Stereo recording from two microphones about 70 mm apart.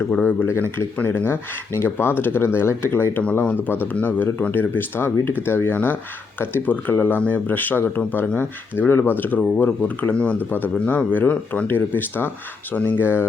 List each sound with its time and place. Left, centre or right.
0.1 s speech: left
0.3 s speech: left